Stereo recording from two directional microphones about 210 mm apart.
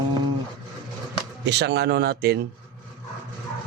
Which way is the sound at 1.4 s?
55° right (ahead or behind).